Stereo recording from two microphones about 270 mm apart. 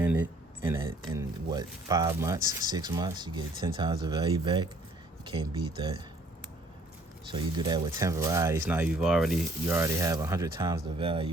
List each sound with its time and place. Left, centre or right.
0.6 s speech: centre
7.3 s speech: centre